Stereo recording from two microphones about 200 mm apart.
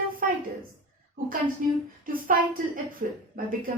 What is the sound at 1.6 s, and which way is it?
A woman's voice, 40° right (ahead or behind).